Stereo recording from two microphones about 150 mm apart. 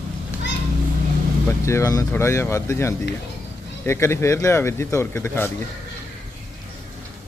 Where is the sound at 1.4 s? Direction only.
20° left (ahead or behind).